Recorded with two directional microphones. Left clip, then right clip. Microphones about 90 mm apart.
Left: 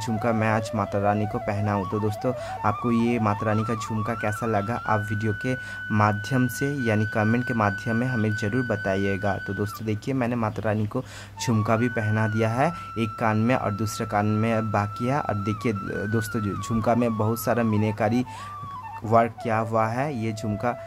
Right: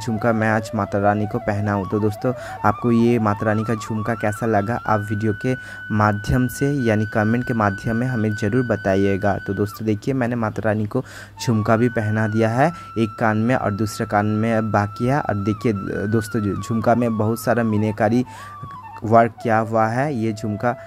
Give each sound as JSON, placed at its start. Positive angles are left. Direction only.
{"t": 0.2, "sound": "speech", "side_deg": -45}
{"t": 1.8, "sound": "speech", "side_deg": 0}
{"t": 2.9, "sound": "speech", "side_deg": -45}